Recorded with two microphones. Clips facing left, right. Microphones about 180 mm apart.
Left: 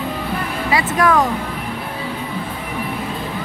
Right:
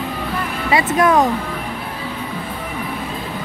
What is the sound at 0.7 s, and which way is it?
Music, 25° right (ahead or behind).